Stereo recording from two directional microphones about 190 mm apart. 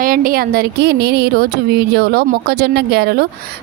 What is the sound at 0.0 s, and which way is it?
A woman's voice, 50° right (ahead or behind).